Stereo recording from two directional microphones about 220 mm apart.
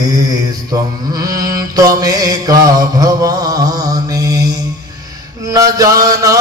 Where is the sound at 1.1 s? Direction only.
15° right (ahead or behind).